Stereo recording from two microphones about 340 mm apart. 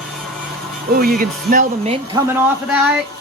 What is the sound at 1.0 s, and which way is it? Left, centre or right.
Speech, right.